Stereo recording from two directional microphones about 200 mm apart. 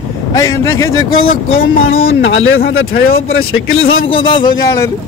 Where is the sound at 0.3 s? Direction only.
15° left (ahead or behind).